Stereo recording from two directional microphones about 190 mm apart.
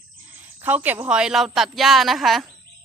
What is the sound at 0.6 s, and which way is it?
Speech, 10° right (ahead or behind).